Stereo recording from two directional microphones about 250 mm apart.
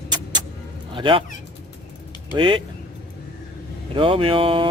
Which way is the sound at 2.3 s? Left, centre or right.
Centre.